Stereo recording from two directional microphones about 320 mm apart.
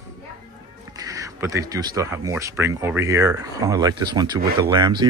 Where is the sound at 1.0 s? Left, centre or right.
Centre.